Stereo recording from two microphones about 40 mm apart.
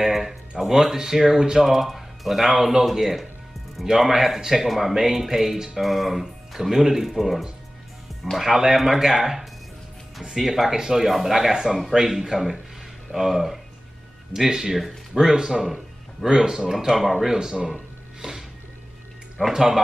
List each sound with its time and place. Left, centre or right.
0.0 s music: centre
0.6 s speech: centre
1.6 s speech: centre
19.5 s speech: centre